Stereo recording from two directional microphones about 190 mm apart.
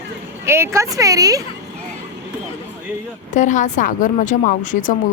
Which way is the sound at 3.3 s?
40° left (ahead or behind).